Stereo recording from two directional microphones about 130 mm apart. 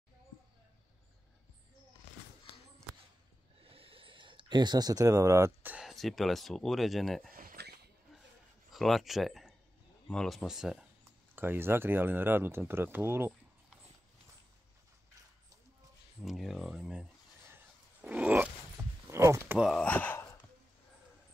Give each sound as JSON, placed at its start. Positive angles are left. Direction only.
{"t": 3.6, "sound": "a sound", "side_deg": -45}
{"t": 5.9, "sound": "speech", "side_deg": 0}
{"t": 8.7, "sound": "speech", "side_deg": 0}
{"t": 11.3, "sound": "speech", "side_deg": -15}
{"t": 16.2, "sound": "a sound", "side_deg": 0}
{"t": 19.7, "sound": "gasp", "side_deg": 10}